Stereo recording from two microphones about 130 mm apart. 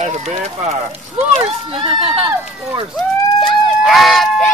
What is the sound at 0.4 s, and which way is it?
Speech, 55° right (ahead or behind).